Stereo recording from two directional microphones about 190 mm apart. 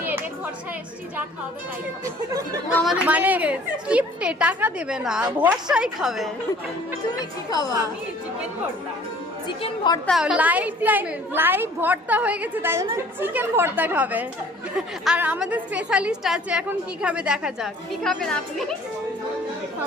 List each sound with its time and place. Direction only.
0.0 s a sound: 10° right (ahead or behind)
2.7 s a woman's voice: centre (ahead or behind)
9.6 s a woman's voice: 25° left (ahead or behind)
10.1 s a woman's voice: centre (ahead or behind)